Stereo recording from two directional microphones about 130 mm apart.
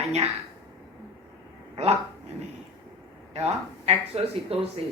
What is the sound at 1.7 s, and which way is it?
Speech, 50° right (ahead or behind).